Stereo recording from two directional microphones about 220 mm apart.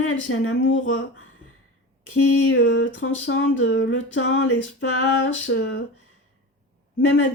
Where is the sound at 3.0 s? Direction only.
65° left (ahead or behind).